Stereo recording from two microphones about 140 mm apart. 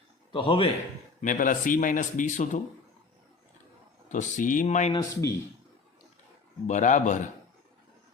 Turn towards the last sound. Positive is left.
turn(degrees=60)  # may be behind; listen again after turning